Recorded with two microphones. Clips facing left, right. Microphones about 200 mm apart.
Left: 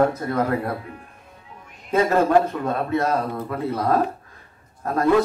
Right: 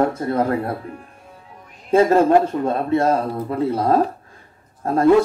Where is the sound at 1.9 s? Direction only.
30° right (ahead or behind).